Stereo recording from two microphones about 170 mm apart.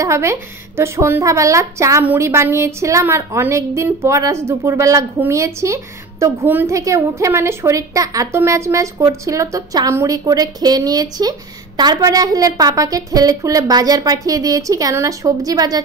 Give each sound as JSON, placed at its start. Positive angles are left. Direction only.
{"t": 0.0, "sound": "a woman's voice", "side_deg": -15}